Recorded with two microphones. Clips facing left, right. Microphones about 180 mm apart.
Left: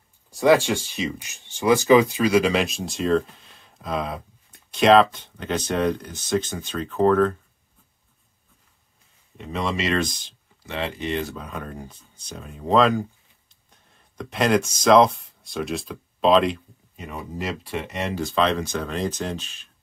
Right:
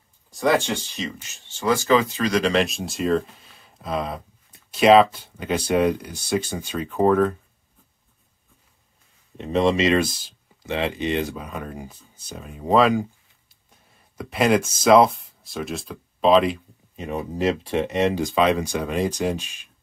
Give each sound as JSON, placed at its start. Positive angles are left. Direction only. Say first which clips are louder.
{"t": 0.7, "sound": "speech", "louder": "left 3 dB", "side_deg": 10}
{"t": 9.5, "sound": "speech", "louder": "right 7 dB", "side_deg": -25}
{"t": 9.9, "sound": "speech", "louder": "right 3 dB", "side_deg": -5}
{"t": 10.6, "sound": "speech", "louder": "right 4 dB", "side_deg": -20}
{"t": 16.9, "sound": "speech", "louder": "right 5 dB", "side_deg": -25}